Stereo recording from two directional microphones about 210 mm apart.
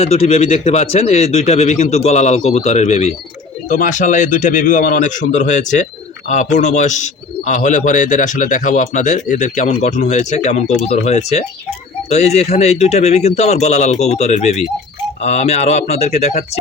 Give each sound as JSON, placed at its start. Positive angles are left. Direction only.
{"t": 0.0, "sound": "a man's voice", "side_deg": 30}